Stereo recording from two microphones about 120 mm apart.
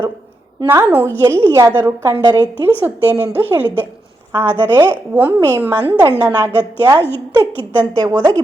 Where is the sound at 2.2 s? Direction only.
30° right (ahead or behind).